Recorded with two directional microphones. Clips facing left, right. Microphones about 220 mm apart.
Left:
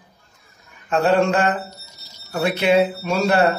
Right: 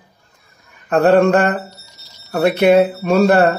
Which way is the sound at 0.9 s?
55° right (ahead or behind).